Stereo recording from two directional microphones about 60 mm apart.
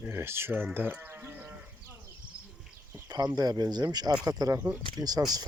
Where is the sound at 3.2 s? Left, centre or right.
Right.